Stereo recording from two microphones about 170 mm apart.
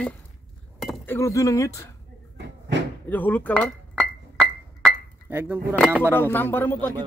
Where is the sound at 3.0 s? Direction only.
10° left (ahead or behind).